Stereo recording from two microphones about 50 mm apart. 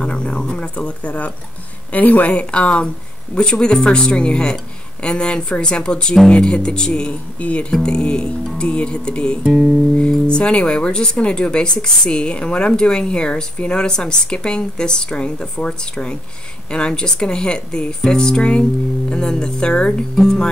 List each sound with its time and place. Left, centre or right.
0.0 s speech: centre
9.4 s music: centre
9.9 s speech: centre